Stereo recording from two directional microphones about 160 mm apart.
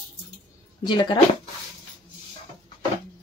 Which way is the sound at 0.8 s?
30° left (ahead or behind).